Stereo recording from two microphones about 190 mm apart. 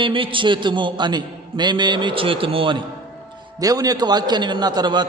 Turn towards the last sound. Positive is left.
turn(degrees=-20)  # may be behind; listen again after turning